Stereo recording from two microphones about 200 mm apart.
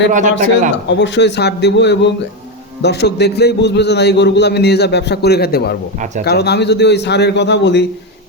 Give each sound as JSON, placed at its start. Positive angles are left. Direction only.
{"t": 0.1, "sound": "a man's voice", "side_deg": -40}
{"t": 0.9, "sound": "a man's voice", "side_deg": 65}